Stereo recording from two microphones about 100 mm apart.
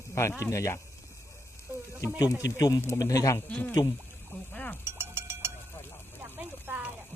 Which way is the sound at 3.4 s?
15° left (ahead or behind).